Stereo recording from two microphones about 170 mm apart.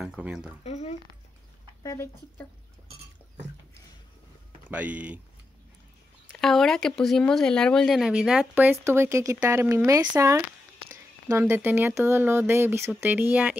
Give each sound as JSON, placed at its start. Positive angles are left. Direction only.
{"t": 0.0, "sound": "speech", "side_deg": -5}
{"t": 0.7, "sound": "a sound", "side_deg": 40}
{"t": 1.8, "sound": "speech", "side_deg": 15}
{"t": 4.6, "sound": "speech", "side_deg": -10}
{"t": 6.3, "sound": "speech", "side_deg": 5}